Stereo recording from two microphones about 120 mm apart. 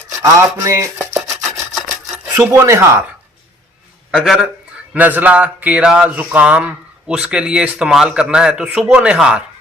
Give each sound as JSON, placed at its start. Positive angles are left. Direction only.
{"t": 0.1, "sound": "a sound", "side_deg": -25}
{"t": 1.3, "sound": "rub", "side_deg": 0}
{"t": 2.5, "sound": "speech", "side_deg": -25}
{"t": 4.1, "sound": "a man's voice", "side_deg": 0}
{"t": 4.9, "sound": "speech", "side_deg": -15}